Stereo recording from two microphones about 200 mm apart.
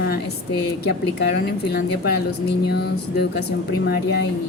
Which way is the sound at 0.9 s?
55° left (ahead or behind).